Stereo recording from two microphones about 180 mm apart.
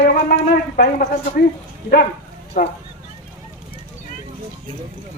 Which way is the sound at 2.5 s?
60° left (ahead or behind).